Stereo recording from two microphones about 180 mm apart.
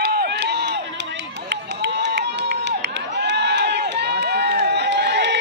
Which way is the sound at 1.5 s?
70° right (ahead or behind).